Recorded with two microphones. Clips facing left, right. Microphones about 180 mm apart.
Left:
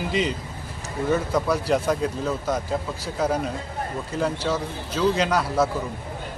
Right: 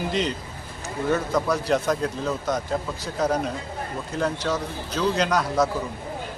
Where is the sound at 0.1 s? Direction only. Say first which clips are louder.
Left 1 dB; 5° left (ahead or behind).